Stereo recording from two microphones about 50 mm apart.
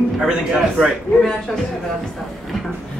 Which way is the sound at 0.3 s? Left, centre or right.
Centre.